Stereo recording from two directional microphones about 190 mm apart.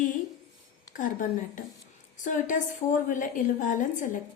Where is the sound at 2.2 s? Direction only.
45° left (ahead or behind).